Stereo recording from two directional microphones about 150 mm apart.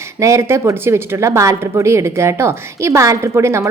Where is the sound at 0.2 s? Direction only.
20° right (ahead or behind).